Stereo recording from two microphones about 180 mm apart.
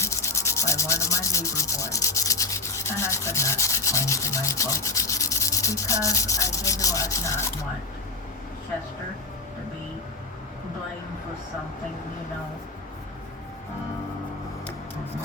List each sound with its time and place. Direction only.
0.0 s sanding: 15° left (ahead or behind)